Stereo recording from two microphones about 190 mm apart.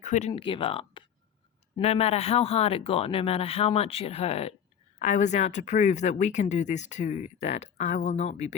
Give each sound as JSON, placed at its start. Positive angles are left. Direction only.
{"t": 0.0, "sound": "speech", "side_deg": 40}